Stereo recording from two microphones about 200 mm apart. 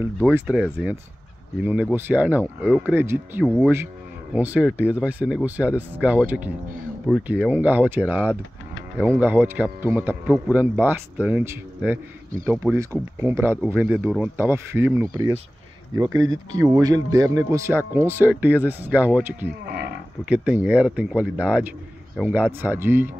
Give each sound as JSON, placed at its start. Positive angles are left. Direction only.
{"t": 0.0, "sound": "speech", "side_deg": -10}